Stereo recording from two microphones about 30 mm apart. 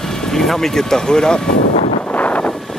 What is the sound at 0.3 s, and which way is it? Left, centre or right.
Speech, centre.